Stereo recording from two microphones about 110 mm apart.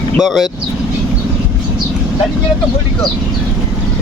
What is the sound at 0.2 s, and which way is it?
Speech, centre (ahead or behind).